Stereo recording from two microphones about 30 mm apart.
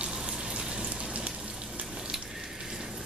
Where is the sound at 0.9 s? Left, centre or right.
Right.